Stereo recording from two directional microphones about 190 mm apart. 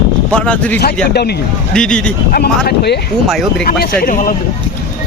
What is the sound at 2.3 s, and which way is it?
Speech, 55° left (ahead or behind).